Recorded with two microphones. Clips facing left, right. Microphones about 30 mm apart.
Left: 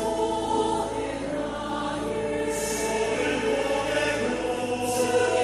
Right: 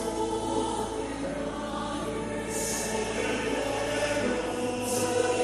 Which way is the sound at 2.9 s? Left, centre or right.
Centre.